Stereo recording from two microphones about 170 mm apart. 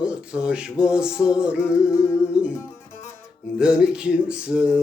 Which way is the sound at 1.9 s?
15° left (ahead or behind).